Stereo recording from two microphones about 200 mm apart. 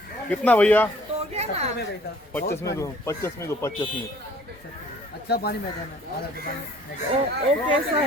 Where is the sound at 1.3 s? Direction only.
30° right (ahead or behind).